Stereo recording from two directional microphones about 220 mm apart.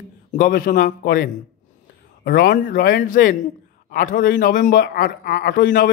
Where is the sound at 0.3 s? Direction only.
40° left (ahead or behind).